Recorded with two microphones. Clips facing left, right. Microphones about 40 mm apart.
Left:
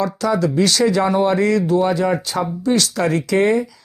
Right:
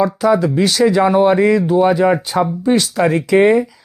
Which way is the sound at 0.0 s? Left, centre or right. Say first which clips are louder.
Right 5 dB; centre.